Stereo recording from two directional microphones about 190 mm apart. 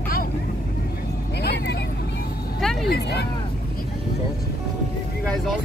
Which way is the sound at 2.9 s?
60° left (ahead or behind).